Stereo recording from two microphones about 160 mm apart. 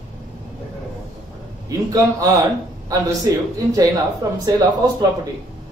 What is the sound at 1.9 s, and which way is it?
Speech, 25° right (ahead or behind).